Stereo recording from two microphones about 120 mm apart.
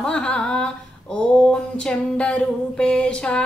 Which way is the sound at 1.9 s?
10° left (ahead or behind).